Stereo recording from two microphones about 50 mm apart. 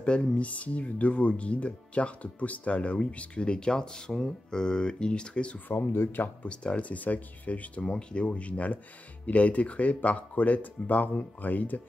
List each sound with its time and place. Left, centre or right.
0.0 s speech: left
5.7 s speech: left
6.1 s speech: left
6.5 s speech: left